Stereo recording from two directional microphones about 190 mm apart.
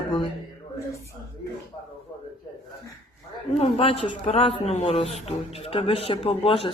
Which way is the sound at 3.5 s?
30° left (ahead or behind).